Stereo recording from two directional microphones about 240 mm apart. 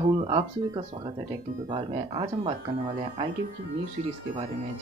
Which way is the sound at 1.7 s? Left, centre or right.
Right.